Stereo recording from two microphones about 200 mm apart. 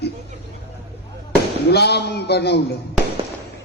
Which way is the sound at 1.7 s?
55° left (ahead or behind).